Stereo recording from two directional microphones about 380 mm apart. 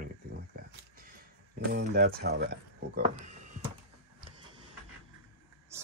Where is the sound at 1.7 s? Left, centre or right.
Right.